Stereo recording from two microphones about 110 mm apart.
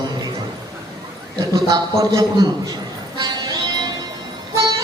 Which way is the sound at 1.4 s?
35° right (ahead or behind).